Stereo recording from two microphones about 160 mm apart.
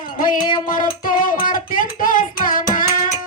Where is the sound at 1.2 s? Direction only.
60° left (ahead or behind).